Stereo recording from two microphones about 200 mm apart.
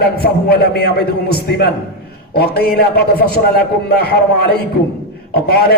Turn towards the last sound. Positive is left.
turn(degrees=50)  # may be behind; listen again after turning